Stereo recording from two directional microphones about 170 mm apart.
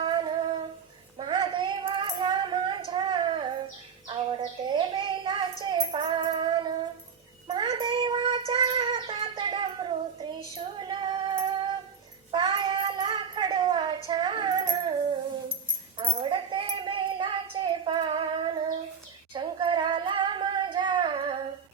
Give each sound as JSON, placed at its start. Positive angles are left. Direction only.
{"t": 0.0, "sound": "humming", "side_deg": -30}
{"t": 1.2, "sound": "female singing", "side_deg": -25}
{"t": 4.1, "sound": "bird", "side_deg": -25}
{"t": 7.4, "sound": "child singing", "side_deg": -25}
{"t": 10.6, "sound": "music", "side_deg": -25}
{"t": 12.3, "sound": "child singing", "side_deg": -25}
{"t": 16.0, "sound": "a sound", "side_deg": -30}
{"t": 19.3, "sound": "singing", "side_deg": -30}